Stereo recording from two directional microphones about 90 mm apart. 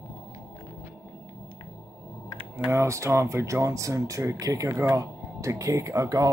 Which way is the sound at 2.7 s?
30° right (ahead or behind).